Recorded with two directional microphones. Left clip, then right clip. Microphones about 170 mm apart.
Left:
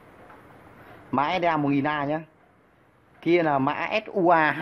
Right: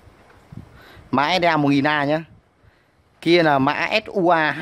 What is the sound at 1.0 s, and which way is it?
Speech, 45° right (ahead or behind).